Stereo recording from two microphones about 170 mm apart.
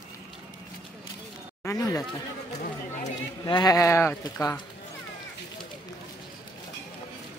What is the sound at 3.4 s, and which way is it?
Speech, 25° left (ahead or behind).